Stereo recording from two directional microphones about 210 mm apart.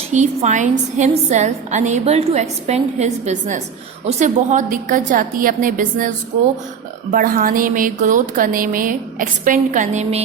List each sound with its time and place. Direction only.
0.1 s a woman's voice: 35° right (ahead or behind)